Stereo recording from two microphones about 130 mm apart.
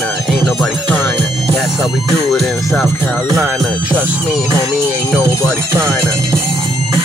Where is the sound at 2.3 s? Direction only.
Centre (ahead or behind).